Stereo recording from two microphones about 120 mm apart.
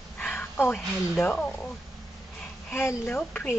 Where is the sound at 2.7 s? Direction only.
20° left (ahead or behind).